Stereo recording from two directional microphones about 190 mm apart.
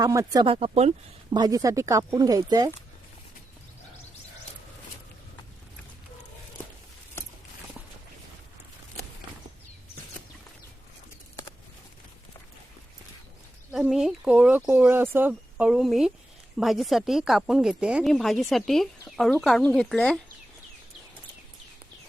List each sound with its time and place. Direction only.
0.0 s speech: 15° right (ahead or behind)
0.4 s speech: 30° right (ahead or behind)
1.4 s speech: 20° right (ahead or behind)
13.7 s a woman's voice: 5° right (ahead or behind)